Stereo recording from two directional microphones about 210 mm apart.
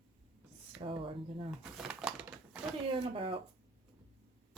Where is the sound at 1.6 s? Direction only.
5° right (ahead or behind).